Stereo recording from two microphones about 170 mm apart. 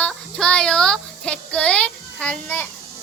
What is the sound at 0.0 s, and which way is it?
Child singing, 5° left (ahead or behind).